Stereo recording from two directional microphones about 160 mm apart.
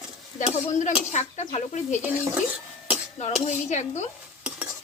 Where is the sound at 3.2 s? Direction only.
45° left (ahead or behind).